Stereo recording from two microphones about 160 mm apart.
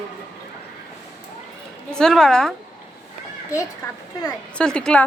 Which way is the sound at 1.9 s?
5° left (ahead or behind).